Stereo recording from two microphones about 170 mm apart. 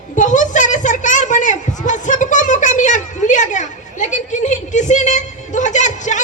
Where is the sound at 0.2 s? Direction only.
45° left (ahead or behind).